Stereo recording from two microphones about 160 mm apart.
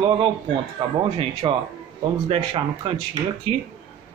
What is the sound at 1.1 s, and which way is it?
A man's voice, 35° right (ahead or behind).